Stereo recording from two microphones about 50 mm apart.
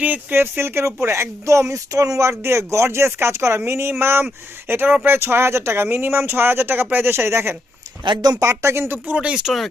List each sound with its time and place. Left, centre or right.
0.0 s speech: right
0.3 s speech: right
2.4 s speech: right
4.7 s speech: right
9.5 s speech: centre